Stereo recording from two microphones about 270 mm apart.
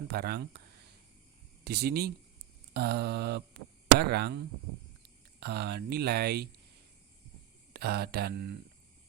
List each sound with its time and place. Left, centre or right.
0.1 s speech: right
1.6 s speech: right
5.4 s speech: right
7.7 s speech: right